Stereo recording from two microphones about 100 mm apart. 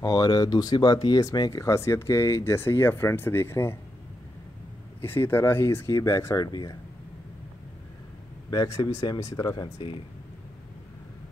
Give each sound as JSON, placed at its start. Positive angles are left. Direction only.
{"t": 0.0, "sound": "speech", "side_deg": 40}
{"t": 5.0, "sound": "speech", "side_deg": 20}
{"t": 8.6, "sound": "speech", "side_deg": 30}
{"t": 9.4, "sound": "speech", "side_deg": 45}
{"t": 9.8, "sound": "speech", "side_deg": 65}